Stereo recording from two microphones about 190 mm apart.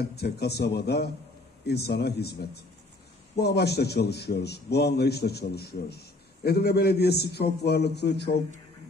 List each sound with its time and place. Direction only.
0.1 s a man's voice: 60° left (ahead or behind)